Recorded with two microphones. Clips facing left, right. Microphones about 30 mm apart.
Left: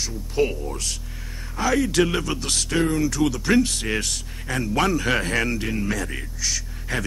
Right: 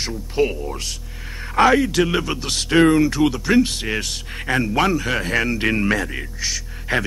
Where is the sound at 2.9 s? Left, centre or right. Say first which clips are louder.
Right 6 dB; right.